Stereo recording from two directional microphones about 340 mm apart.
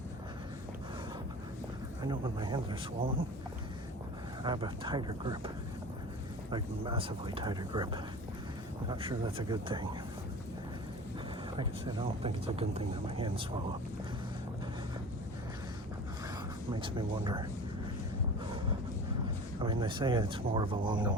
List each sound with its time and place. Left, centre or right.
2.0 s speech: centre
4.4 s speech: centre
6.5 s speech: centre
8.9 s speech: centre
11.5 s speech: centre
16.8 s speech: centre
19.5 s speech: centre